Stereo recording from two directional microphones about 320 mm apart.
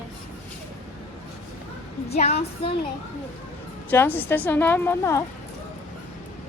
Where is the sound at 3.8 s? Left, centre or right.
Centre.